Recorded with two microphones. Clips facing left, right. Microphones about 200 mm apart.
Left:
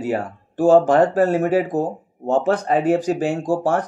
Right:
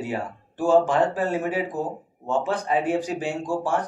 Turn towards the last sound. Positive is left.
turn(degrees=40)  # may be behind; listen again after turning